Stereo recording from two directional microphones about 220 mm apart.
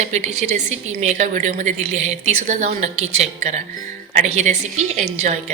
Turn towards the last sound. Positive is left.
turn(degrees=-30)  # may be behind; listen again after turning